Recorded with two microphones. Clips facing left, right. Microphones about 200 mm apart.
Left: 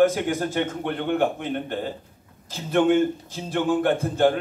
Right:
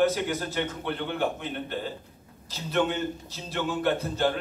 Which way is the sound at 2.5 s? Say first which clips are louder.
Left 7 dB; 50° left (ahead or behind).